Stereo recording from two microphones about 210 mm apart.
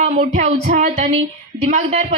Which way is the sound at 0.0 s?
35° right (ahead or behind).